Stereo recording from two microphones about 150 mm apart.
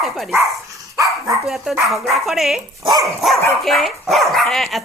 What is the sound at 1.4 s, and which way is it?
Speech, centre (ahead or behind).